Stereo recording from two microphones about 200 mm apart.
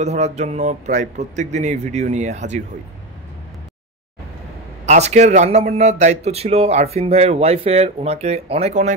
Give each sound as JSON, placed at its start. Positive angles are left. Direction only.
{"t": 0.0, "sound": "a man's voice", "side_deg": -35}
{"t": 4.8, "sound": "a man's voice", "side_deg": -35}